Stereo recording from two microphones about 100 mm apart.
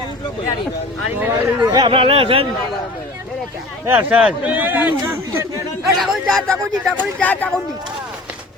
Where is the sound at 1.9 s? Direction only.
65° right (ahead or behind).